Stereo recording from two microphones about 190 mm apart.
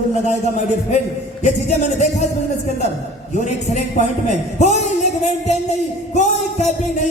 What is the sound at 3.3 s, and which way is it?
A man's voice, 40° left (ahead or behind).